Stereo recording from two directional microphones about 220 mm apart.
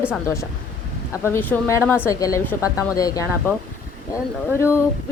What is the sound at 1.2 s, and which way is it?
Speech, 10° left (ahead or behind).